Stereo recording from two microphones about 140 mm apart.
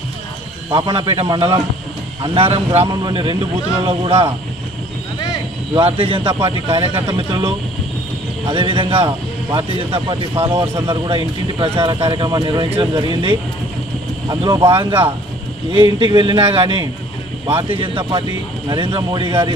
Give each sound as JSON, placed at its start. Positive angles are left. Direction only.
{"t": 0.7, "sound": "a man's voice", "side_deg": -35}
{"t": 5.7, "sound": "a man's voice", "side_deg": -40}
{"t": 14.7, "sound": "a man's voice", "side_deg": -40}